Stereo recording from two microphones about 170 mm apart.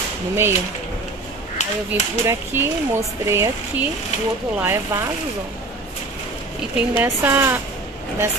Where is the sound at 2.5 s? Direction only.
15° right (ahead or behind).